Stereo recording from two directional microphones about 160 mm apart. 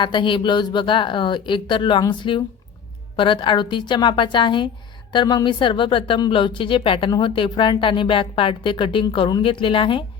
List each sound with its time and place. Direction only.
0.0 s a woman's voice: 30° left (ahead or behind)